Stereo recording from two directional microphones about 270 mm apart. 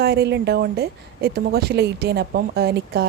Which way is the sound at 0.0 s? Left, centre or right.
Right.